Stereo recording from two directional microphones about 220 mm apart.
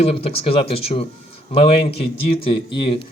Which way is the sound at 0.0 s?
25° left (ahead or behind).